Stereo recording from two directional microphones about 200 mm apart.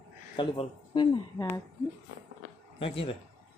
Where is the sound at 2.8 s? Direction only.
30° left (ahead or behind).